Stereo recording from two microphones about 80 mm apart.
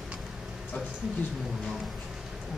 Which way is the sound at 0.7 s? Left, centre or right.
Centre.